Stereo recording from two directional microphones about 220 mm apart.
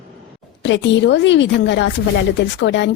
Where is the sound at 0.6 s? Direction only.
55° left (ahead or behind).